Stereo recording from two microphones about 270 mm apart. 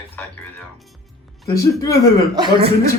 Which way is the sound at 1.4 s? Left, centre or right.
Left.